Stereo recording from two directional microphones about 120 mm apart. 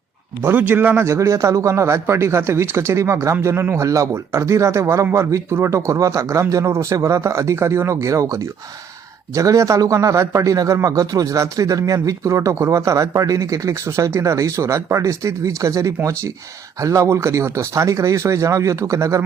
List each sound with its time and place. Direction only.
0.4 s a man's voice: 15° right (ahead or behind)